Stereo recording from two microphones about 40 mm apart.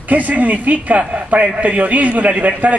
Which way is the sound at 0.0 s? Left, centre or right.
Right.